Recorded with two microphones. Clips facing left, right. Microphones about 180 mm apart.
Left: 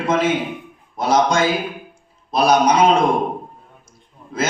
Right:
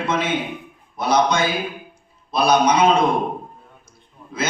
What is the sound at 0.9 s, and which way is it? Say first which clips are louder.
A man's voice: left 2 dB; 45° left (ahead or behind).